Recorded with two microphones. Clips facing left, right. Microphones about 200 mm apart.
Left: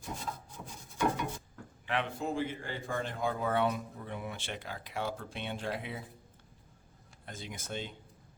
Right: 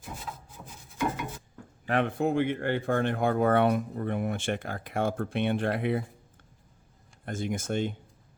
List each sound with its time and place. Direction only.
0.0 s rub: 5° right (ahead or behind)
1.9 s speech: 55° right (ahead or behind)
7.3 s speech: 50° right (ahead or behind)